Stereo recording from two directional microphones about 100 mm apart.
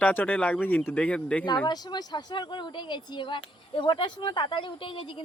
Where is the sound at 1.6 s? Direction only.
45° left (ahead or behind).